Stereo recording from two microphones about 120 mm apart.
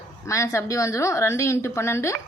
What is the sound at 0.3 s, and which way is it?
A woman's voice, 25° left (ahead or behind).